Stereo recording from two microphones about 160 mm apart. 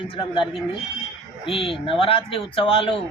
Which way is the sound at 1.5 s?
35° left (ahead or behind).